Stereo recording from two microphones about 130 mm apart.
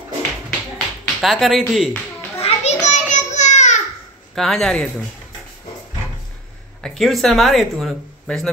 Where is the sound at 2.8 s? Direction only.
70° left (ahead or behind).